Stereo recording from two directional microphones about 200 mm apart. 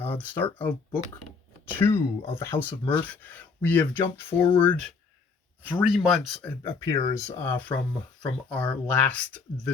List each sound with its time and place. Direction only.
0.0 s speech: 10° left (ahead or behind)
5.9 s speech: centre (ahead or behind)
6.6 s speech: 15° left (ahead or behind)